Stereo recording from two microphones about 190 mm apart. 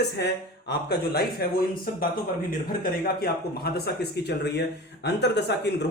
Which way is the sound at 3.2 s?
55° left (ahead or behind).